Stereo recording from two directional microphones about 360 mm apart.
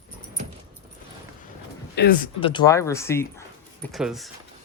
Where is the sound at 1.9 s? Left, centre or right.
Left; by 4.3 s centre.